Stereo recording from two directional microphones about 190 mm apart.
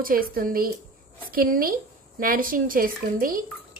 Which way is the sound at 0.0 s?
50° right (ahead or behind).